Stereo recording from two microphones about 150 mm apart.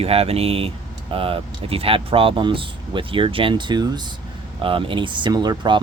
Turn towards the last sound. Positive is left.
turn(degrees=-30)  # may be behind; listen again after turning